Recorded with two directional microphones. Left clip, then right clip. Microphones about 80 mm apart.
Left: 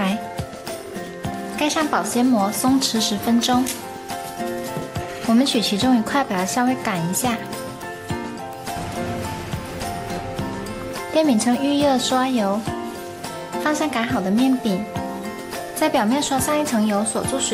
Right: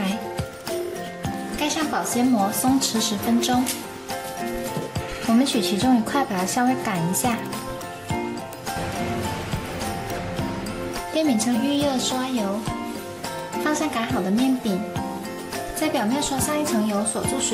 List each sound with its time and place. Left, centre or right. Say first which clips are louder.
1.6 s a woman's voice: left 4 dB; left
5.4 s speech: left 3 dB; centre
11.1 s a woman's voice: left 4 dB; left
13.7 s a woman's voice: left 3 dB; left
15.8 s a woman's voice: left 5 dB; left